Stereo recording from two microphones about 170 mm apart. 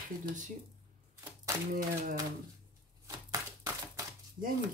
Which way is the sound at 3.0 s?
20° right (ahead or behind).